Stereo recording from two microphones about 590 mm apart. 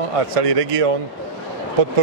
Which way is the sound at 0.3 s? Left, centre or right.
Right.